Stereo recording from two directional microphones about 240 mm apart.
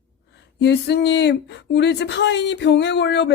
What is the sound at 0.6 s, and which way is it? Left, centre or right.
Speech, left.